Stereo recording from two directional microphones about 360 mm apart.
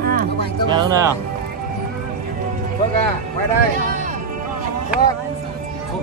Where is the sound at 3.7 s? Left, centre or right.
Right.